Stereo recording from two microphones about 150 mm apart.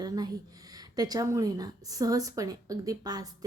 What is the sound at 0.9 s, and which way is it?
A woman's voice, 25° right (ahead or behind).